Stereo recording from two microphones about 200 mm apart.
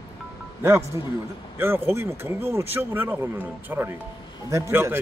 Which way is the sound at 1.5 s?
10° right (ahead or behind).